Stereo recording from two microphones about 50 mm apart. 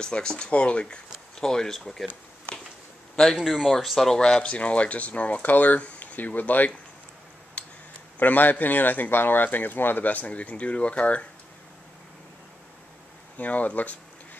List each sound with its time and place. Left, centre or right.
0.0 s speech: centre
1.4 s speech: centre
3.3 s speech: centre
4.2 s speech: left
7.6 s a sound: left
8.2 s speech: left
13.4 s speech: left